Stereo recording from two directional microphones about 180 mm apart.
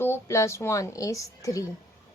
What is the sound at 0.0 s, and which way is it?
Speech, 15° left (ahead or behind).